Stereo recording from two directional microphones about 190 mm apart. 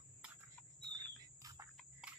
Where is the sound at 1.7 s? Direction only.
5° right (ahead or behind).